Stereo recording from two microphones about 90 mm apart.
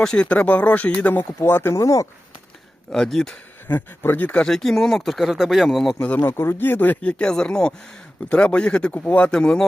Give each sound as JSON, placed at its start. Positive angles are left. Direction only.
{"t": 0.0, "sound": "speech", "side_deg": 10}
{"t": 1.2, "sound": "speech", "side_deg": 25}
{"t": 2.9, "sound": "speech", "side_deg": 5}
{"t": 3.7, "sound": "speech", "side_deg": 20}
{"t": 6.0, "sound": "speech", "side_deg": 15}